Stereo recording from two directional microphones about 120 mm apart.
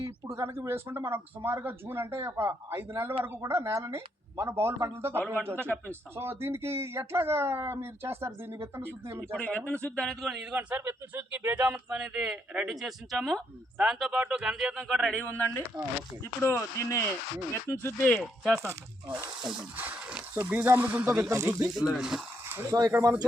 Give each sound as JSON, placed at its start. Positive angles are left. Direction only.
{"t": 0.3, "sound": "speech", "side_deg": -25}
{"t": 9.3, "sound": "speech", "side_deg": 10}
{"t": 10.5, "sound": "speech", "side_deg": -10}
{"t": 16.4, "sound": "speech", "side_deg": 20}
{"t": 18.5, "sound": "speech", "side_deg": -20}
{"t": 21.8, "sound": "speech", "side_deg": -5}
{"t": 22.4, "sound": "a sound", "side_deg": -20}
{"t": 22.9, "sound": "speech", "side_deg": -25}